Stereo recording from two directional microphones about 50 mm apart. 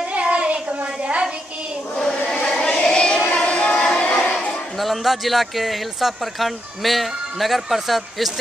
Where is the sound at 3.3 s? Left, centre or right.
Left.